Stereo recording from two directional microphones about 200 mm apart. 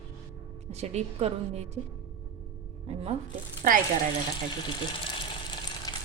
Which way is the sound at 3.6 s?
45° right (ahead or behind).